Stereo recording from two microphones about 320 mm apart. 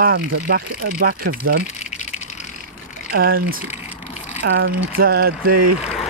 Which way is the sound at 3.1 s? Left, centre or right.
Right.